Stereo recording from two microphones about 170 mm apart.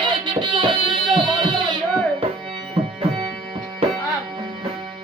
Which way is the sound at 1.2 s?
25° right (ahead or behind).